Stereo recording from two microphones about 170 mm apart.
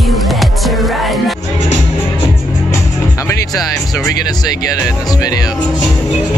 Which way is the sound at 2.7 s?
20° left (ahead or behind).